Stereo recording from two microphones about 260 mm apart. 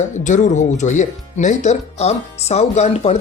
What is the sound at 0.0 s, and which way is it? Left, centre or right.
Speech, left.